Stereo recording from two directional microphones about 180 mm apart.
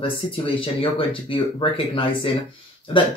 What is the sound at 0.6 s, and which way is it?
Speech, 30° left (ahead or behind).